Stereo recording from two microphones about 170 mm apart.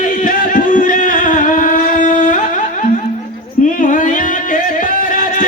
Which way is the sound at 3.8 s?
50° left (ahead or behind).